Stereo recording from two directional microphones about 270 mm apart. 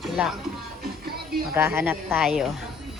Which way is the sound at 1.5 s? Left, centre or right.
Centre.